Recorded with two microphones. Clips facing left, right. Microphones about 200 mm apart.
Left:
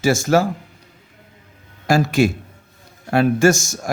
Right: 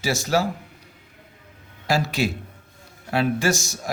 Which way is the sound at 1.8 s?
50° left (ahead or behind).